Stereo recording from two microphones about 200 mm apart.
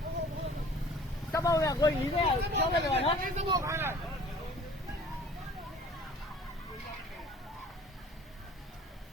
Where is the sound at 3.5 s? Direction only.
15° right (ahead or behind).